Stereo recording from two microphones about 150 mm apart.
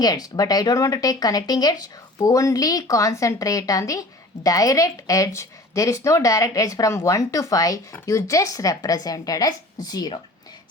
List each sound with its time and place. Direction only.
0.0 s speech: 25° left (ahead or behind)